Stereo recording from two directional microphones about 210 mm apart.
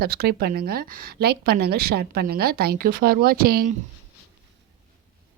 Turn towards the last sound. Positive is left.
turn(degrees=-45)  # may be behind; listen again after turning